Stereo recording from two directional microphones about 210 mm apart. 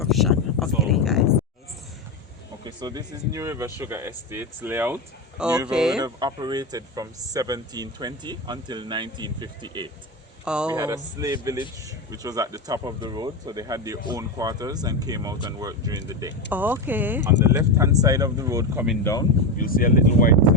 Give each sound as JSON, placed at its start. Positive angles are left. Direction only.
{"t": 0.0, "sound": "a sound", "side_deg": 0}
{"t": 2.6, "sound": "speech", "side_deg": -20}
{"t": 6.0, "sound": "speech", "side_deg": -20}
{"t": 10.4, "sound": "speech", "side_deg": -5}
{"t": 10.8, "sound": "speech", "side_deg": -20}
{"t": 19.5, "sound": "speech", "side_deg": 40}